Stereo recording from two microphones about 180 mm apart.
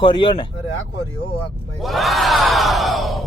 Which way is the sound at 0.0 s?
25° left (ahead or behind).